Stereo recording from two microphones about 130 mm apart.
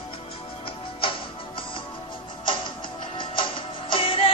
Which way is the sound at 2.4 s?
40° left (ahead or behind).